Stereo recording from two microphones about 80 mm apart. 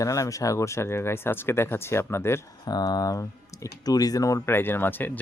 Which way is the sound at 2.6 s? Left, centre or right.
Left.